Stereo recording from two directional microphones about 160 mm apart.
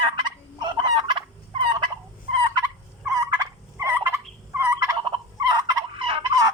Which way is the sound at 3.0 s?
20° right (ahead or behind).